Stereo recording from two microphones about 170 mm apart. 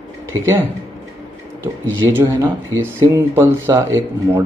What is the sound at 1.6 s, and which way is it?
Speech, 15° right (ahead or behind).